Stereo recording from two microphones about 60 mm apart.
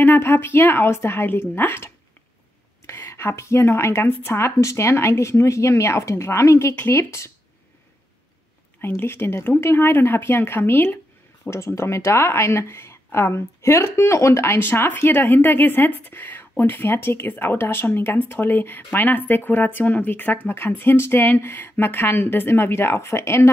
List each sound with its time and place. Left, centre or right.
0.0 s speech: left
2.9 s a woman's voice: left
4.5 s speech: left
8.8 s speech: left
11.5 s speech: left